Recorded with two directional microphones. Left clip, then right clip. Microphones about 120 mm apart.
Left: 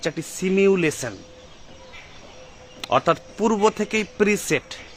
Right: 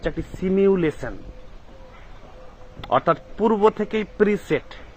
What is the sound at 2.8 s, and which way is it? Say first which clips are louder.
Speech: even; 10° left (ahead or behind).